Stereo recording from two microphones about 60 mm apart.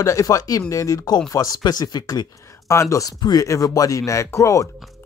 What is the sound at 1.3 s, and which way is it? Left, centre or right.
Speech, left.